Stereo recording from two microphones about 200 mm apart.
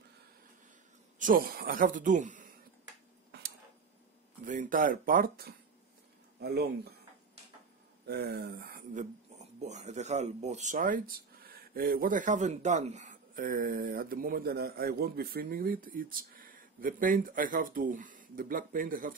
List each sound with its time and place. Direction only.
1.2 s speech: 45° right (ahead or behind)
3.3 s a sound: 55° right (ahead or behind)
4.5 s speech: 40° right (ahead or behind)
8.1 s speech: 50° right (ahead or behind)
9.6 s speech: 35° right (ahead or behind)